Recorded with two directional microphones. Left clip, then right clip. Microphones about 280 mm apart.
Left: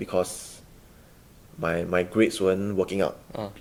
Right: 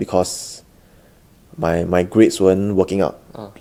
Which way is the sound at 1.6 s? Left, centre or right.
Right.